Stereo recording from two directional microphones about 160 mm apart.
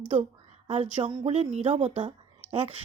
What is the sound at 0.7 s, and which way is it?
Speech, 35° right (ahead or behind).